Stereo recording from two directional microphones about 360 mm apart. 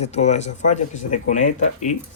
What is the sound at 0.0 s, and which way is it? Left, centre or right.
Speech, centre.